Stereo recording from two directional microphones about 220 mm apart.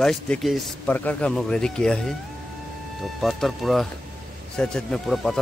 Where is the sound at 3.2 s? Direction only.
Centre (ahead or behind).